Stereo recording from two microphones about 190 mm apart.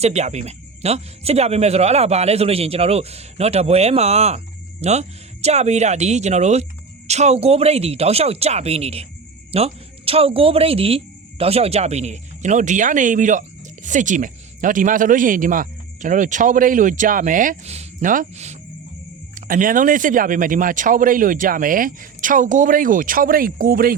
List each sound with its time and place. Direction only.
0.0 s speech: 35° right (ahead or behind)